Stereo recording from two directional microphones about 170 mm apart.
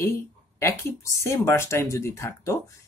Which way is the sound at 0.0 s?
15° left (ahead or behind).